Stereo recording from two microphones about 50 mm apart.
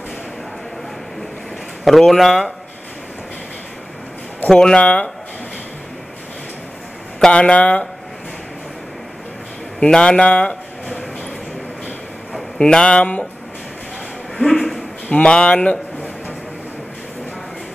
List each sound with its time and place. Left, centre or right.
1.9 s speech: centre
4.5 s speech: centre
7.2 s speech: centre
9.8 s a sound: centre
12.5 s speech: centre
14.4 s a sound: centre
15.0 s speech: left